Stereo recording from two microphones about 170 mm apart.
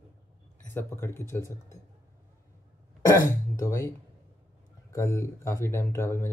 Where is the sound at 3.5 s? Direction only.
20° left (ahead or behind).